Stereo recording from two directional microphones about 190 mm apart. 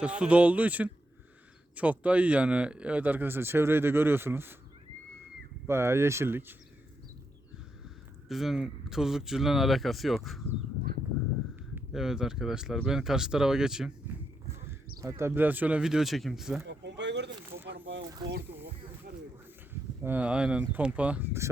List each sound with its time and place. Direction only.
0.0 s speech: 5° right (ahead or behind)
5.6 s speech: 15° right (ahead or behind)
8.3 s speech: centre (ahead or behind)
11.9 s speech: centre (ahead or behind)
14.9 s speech: 15° right (ahead or behind)
16.6 s a sound: 65° right (ahead or behind)
20.0 s speech: 5° right (ahead or behind)